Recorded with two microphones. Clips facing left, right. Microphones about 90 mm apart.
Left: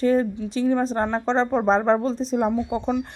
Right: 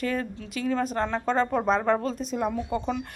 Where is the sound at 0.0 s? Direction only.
30° left (ahead or behind).